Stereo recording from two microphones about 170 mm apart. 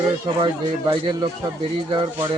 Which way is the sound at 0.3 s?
25° right (ahead or behind).